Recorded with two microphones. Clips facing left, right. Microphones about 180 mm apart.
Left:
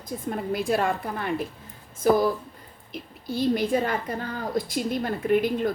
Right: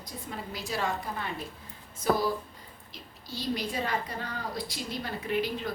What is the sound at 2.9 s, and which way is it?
A woman's voice, 55° left (ahead or behind).